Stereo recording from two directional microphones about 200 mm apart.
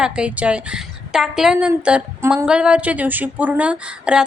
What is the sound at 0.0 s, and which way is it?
A woman's voice, 5° right (ahead or behind).